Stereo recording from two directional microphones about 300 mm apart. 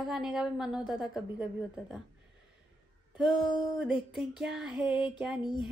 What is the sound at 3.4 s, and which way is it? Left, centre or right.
Speech, centre.